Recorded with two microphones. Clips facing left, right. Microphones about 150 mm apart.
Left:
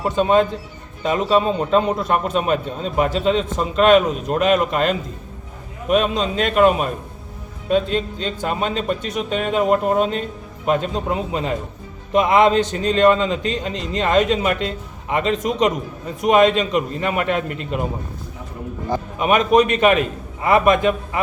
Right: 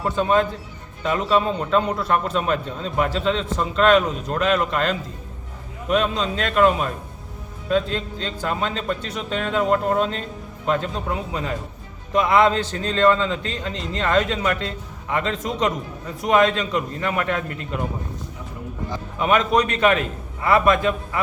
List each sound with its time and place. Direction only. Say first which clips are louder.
0.0 s a man's voice: left 3 dB; 20° left (ahead or behind)
19.2 s a man's voice: left 3 dB; 20° left (ahead or behind)